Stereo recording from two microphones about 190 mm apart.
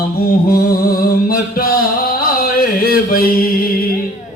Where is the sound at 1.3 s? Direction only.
50° left (ahead or behind).